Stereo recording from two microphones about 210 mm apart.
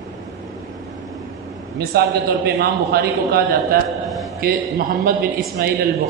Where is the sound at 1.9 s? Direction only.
50° right (ahead or behind).